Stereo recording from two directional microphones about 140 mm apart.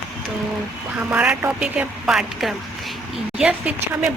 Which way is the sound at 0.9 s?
10° right (ahead or behind).